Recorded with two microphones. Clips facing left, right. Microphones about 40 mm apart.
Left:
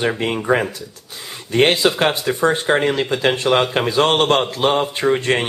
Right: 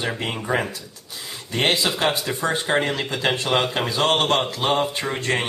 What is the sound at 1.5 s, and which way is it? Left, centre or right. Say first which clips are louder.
Speech: left 6 dB; left.